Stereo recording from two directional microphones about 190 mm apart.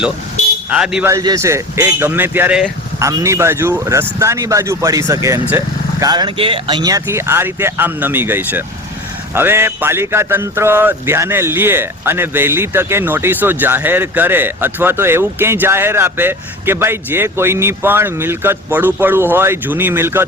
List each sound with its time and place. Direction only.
0.7 s a man's voice: 5° right (ahead or behind)
1.0 s speech: 20° right (ahead or behind)